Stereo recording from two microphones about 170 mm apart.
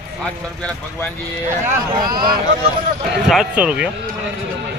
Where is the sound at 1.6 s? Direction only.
20° right (ahead or behind).